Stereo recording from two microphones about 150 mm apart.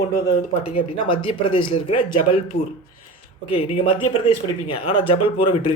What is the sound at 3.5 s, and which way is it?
Speech, 40° left (ahead or behind).